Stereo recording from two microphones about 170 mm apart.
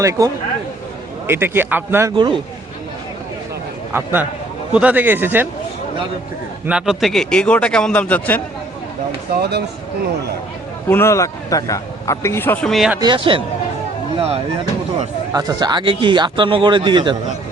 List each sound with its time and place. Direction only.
0.0 s a man's voice: 20° right (ahead or behind)
1.3 s speech: 15° right (ahead or behind)
2.1 s a man's voice: 30° right (ahead or behind)
3.9 s speech: 10° right (ahead or behind)
6.7 s a man's voice: 5° right (ahead or behind)
9.3 s speech: 70° right (ahead or behind)
10.8 s a man's voice: 15° left (ahead or behind)
13.0 s a man's voice: 30° right (ahead or behind)
15.3 s a man's voice: 20° right (ahead or behind)